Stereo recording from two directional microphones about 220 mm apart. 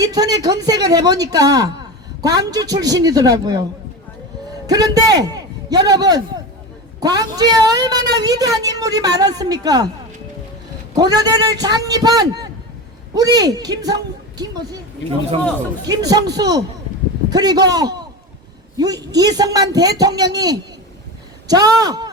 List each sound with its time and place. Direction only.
0.0 s a woman's voice: 15° right (ahead or behind)
4.6 s a man's voice: 15° right (ahead or behind)
10.9 s a woman's voice: 15° right (ahead or behind)
15.9 s a woman's voice: 15° right (ahead or behind)